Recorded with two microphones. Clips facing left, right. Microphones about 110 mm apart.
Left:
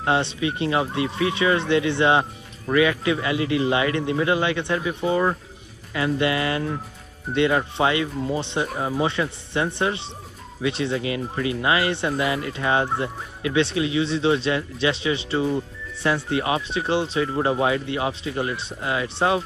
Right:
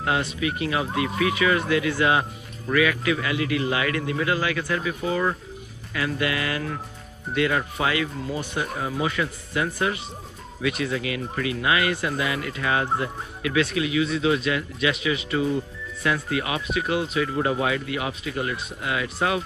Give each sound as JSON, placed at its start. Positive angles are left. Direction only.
{"t": 0.0, "sound": "speech", "side_deg": 30}